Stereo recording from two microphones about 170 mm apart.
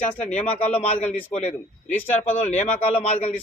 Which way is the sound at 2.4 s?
45° left (ahead or behind).